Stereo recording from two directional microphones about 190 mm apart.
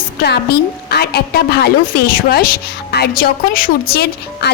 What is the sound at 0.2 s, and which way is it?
A woman's voice, 55° left (ahead or behind).